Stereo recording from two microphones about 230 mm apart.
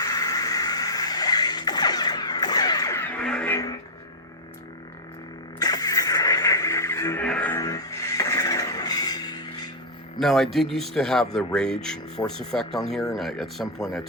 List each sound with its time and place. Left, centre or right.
0.0 s music: centre
5.5 s music: centre
10.2 s speech: centre